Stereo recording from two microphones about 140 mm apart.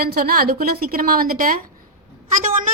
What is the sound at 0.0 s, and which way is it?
A woman's voice, 90° right.